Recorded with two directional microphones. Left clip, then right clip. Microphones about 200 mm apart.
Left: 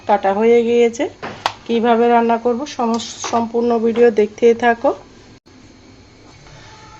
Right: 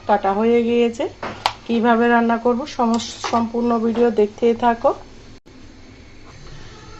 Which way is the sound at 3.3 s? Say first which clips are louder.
Left 4 dB; 20° left (ahead or behind).